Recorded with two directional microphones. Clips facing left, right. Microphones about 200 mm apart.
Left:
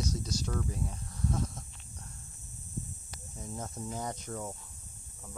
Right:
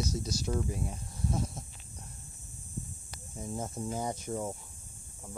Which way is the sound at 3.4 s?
15° right (ahead or behind).